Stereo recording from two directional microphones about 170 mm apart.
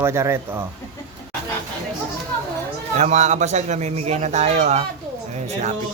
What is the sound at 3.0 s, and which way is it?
A man's voice, 40° right (ahead or behind).